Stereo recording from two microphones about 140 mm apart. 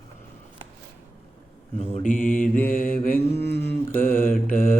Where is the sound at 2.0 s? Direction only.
65° left (ahead or behind).